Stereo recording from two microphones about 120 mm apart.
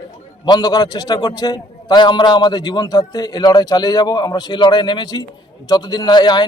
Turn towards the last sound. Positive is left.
turn(degrees=35)  # may be behind; listen again after turning